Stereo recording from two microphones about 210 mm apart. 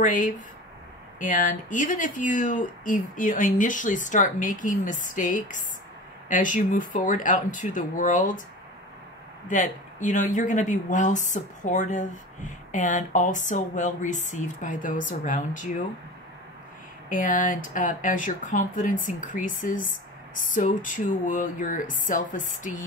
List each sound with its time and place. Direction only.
0.0 s speech: 40° left (ahead or behind)
9.5 s speech: 35° left (ahead or behind)
17.1 s speech: 40° left (ahead or behind)